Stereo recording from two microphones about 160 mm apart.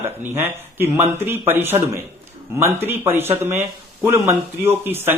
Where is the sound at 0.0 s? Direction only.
15° right (ahead or behind).